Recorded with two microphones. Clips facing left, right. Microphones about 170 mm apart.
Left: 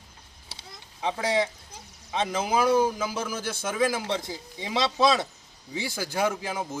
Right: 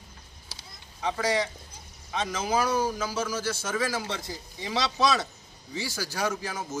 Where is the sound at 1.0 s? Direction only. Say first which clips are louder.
Left 1 dB; 20° left (ahead or behind).